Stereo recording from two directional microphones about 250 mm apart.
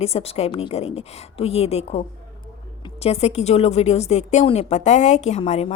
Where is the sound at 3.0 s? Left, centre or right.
Left.